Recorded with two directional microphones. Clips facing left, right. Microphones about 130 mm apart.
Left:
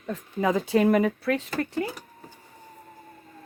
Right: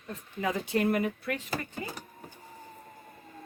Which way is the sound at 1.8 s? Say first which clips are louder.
Left 9 dB; 70° left (ahead or behind).